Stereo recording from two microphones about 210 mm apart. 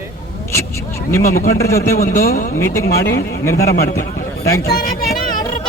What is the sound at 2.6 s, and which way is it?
Speech, 15° left (ahead or behind).